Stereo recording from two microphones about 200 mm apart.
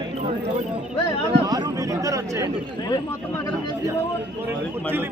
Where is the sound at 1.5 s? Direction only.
20° right (ahead or behind).